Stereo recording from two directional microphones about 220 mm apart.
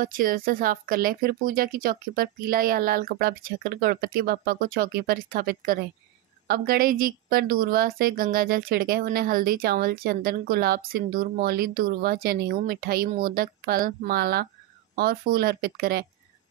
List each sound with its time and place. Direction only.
0.0 s a woman's voice: 40° right (ahead or behind)